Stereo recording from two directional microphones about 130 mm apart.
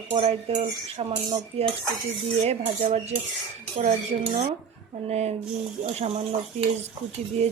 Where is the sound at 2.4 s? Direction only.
50° right (ahead or behind).